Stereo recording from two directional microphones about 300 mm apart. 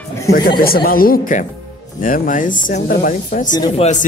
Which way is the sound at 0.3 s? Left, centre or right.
Left.